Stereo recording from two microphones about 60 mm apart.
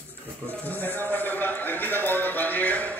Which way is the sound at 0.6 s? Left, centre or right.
Left.